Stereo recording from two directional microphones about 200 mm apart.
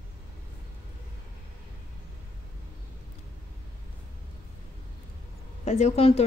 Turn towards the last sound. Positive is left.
turn(degrees=30)  # may be behind; listen again after turning